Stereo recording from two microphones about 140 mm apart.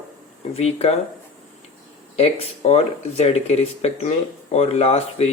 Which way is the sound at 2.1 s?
50° left (ahead or behind).